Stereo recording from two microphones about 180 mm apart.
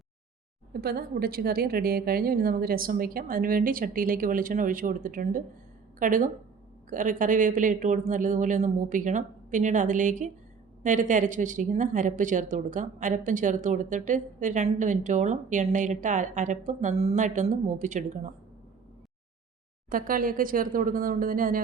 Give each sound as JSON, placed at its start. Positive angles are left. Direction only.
{"t": 0.7, "sound": "speech", "side_deg": -60}
{"t": 19.9, "sound": "speech", "side_deg": -50}